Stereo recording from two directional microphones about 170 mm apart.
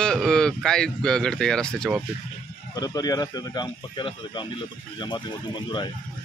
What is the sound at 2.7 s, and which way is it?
Speech, 20° left (ahead or behind).